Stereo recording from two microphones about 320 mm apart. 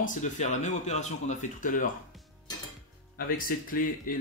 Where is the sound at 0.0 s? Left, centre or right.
Left.